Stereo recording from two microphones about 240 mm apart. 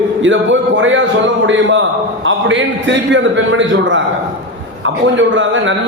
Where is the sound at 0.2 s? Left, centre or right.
Right.